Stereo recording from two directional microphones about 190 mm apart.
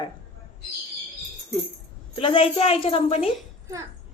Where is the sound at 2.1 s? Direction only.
30° left (ahead or behind).